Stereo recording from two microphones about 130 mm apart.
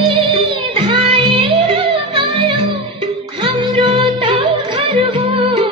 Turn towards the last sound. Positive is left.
turn(degrees=-45)  # may be behind; listen again after turning